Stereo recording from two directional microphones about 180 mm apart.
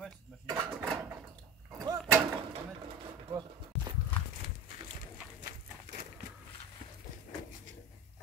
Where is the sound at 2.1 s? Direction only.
10° right (ahead or behind).